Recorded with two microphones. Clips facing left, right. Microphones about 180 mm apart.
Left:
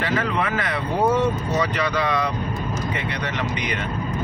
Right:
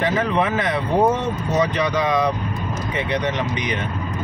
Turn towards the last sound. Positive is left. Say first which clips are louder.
# right 3 dB
turn(degrees=-20)  # may be behind; listen again after turning